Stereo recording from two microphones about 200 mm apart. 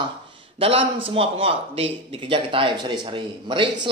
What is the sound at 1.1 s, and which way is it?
Speech, 30° right (ahead or behind).